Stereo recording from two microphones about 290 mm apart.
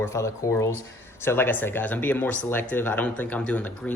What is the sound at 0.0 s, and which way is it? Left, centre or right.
Speech, centre.